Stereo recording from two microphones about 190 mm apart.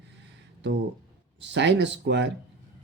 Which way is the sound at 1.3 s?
70° right (ahead or behind).